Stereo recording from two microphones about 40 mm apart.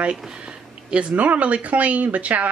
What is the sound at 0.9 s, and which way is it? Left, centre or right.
A woman's voice, right.